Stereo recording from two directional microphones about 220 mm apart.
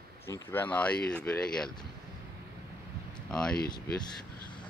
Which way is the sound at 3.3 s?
5° left (ahead or behind).